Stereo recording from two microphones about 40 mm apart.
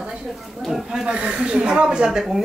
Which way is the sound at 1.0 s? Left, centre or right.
Right.